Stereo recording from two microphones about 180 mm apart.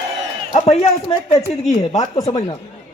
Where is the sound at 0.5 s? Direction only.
35° left (ahead or behind).